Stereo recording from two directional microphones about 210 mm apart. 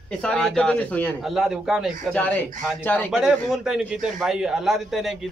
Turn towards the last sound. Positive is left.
turn(degrees=0)  # may be behind; listen again after turning